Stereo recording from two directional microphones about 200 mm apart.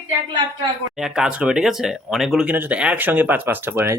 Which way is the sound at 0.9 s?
Centre (ahead or behind).